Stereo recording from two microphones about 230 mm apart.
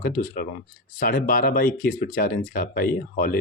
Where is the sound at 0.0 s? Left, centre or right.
Left.